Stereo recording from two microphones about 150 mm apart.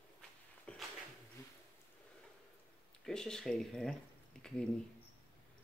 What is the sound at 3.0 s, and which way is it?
Speech, 5° left (ahead or behind).